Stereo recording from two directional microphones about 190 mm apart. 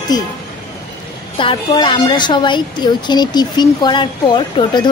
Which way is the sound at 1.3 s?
25° left (ahead or behind).